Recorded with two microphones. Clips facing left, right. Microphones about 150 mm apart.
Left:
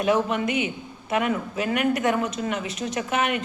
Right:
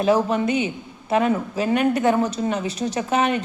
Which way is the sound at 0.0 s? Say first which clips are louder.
Right 3 dB; 30° right (ahead or behind).